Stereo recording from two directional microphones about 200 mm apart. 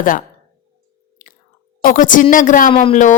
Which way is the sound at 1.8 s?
45° left (ahead or behind).